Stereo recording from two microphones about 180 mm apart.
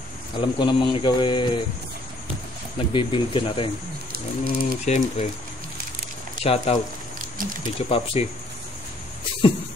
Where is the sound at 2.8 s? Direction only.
30° left (ahead or behind).